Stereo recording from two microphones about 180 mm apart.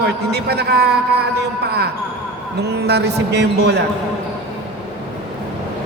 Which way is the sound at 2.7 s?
65° right (ahead or behind).